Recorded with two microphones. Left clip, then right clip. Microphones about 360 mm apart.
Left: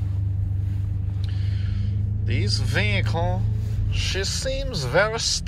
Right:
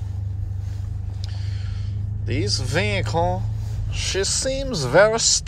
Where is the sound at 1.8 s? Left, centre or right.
Right.